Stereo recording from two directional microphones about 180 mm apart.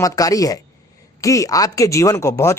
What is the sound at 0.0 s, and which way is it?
A man's voice, 20° left (ahead or behind).